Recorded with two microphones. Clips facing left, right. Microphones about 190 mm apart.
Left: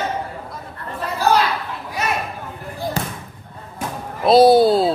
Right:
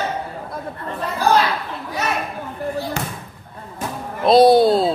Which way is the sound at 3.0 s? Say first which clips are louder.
Left 1 dB; 35° left (ahead or behind).